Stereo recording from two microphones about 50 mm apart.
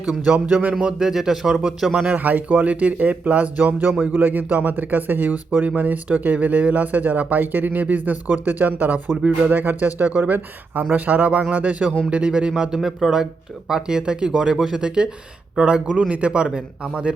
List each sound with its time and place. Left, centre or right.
0.0 s speech: right
2.0 s speech: right
14.3 s speech: centre